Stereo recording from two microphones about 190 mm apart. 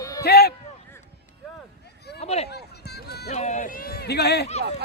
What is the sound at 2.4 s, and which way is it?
Run, 60° left (ahead or behind).